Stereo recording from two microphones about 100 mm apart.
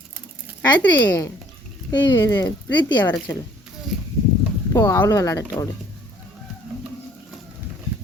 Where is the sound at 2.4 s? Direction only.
50° left (ahead or behind).